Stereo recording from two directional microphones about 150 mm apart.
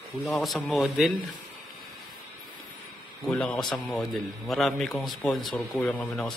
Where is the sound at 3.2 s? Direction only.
5° left (ahead or behind).